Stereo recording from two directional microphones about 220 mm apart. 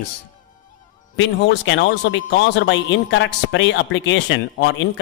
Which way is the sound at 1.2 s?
55° left (ahead or behind).